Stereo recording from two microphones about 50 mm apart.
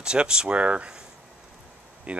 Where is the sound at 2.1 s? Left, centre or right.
Right.